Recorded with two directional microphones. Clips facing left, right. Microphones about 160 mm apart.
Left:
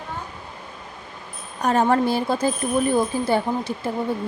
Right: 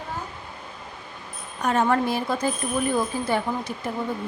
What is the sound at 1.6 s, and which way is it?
A woman's voice, 35° left (ahead or behind).